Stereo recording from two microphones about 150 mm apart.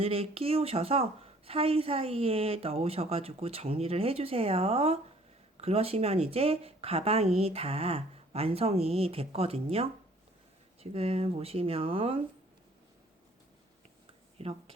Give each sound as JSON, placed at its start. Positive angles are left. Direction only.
{"t": 0.0, "sound": "a woman's voice", "side_deg": -40}
{"t": 14.4, "sound": "a woman's voice", "side_deg": -40}